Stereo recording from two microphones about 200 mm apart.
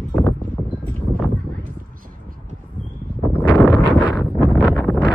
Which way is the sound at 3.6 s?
5° left (ahead or behind).